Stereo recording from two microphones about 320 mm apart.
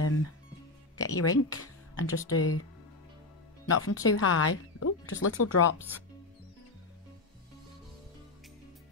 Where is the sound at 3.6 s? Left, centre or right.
Left.